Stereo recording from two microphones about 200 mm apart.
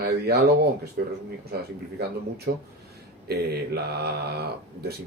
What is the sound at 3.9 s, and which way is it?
Speech, 55° right (ahead or behind).